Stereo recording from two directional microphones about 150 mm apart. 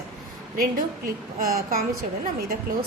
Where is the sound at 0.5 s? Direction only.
70° right (ahead or behind).